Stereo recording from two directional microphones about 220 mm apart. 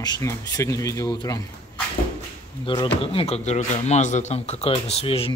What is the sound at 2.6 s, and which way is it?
Speech, 25° left (ahead or behind).